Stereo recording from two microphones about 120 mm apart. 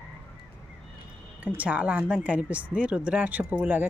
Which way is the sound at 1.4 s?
10° right (ahead or behind).